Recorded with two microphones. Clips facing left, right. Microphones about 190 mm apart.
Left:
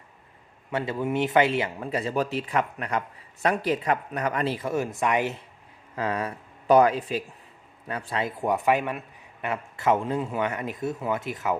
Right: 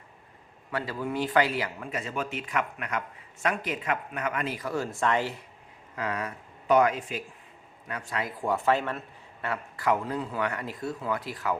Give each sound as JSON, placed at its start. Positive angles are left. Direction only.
{"t": 0.7, "sound": "a man's voice", "side_deg": 20}
{"t": 6.0, "sound": "a man's voice", "side_deg": 30}